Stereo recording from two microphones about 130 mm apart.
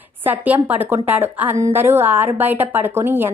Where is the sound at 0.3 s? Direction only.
15° right (ahead or behind).